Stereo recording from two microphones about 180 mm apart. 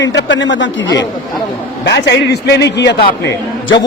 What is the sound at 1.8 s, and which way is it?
A man's voice, 75° left (ahead or behind).